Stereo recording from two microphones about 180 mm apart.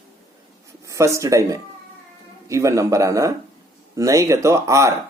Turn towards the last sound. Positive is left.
turn(degrees=-15)  # may be behind; listen again after turning